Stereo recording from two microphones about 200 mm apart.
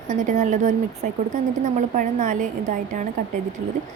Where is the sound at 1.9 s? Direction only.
40° right (ahead or behind).